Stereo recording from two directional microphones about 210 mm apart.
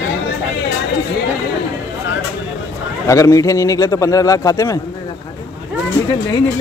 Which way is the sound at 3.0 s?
15° left (ahead or behind).